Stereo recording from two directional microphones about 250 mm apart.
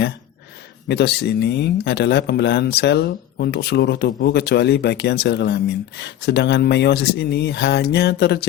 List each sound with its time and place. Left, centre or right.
0.9 s speech: left